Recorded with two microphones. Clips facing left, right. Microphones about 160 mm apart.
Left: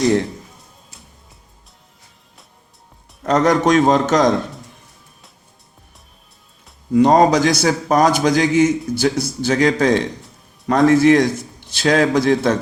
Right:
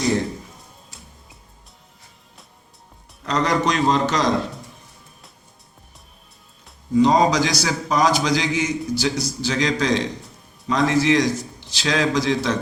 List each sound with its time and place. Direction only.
3.2 s a man's voice: 50° left (ahead or behind)
6.9 s a man's voice: 55° left (ahead or behind)